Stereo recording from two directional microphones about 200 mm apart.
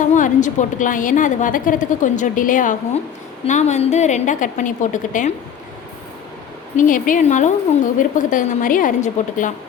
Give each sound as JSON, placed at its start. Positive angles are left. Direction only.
{"t": 0.0, "sound": "a woman's voice", "side_deg": 40}
{"t": 6.7, "sound": "a woman's voice", "side_deg": 40}